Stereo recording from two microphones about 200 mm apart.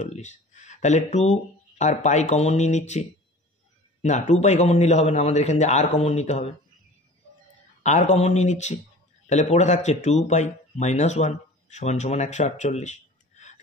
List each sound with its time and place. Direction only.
0.0 s a man's voice: 35° left (ahead or behind)
7.8 s a man's voice: 35° left (ahead or behind)